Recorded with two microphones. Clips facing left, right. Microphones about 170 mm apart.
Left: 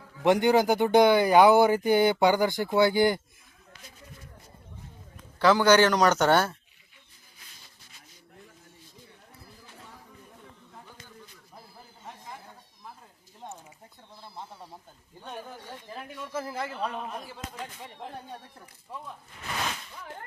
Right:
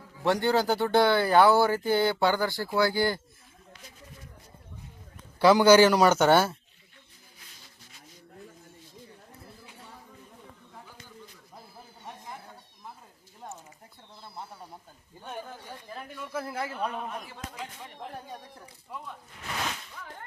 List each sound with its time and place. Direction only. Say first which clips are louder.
0.3 s speech: left 3 dB; 15° left (ahead or behind)
5.4 s speech: right 2 dB; 15° right (ahead or behind)
16.0 s a man's voice: left 1 dB; centre (ahead or behind)